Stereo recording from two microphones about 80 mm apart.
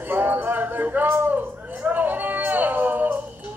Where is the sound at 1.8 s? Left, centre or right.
Right.